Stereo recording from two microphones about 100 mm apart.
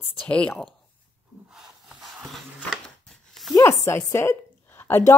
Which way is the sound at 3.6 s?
25° left (ahead or behind).